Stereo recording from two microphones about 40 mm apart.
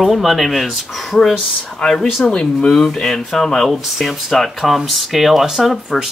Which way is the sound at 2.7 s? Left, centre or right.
Centre.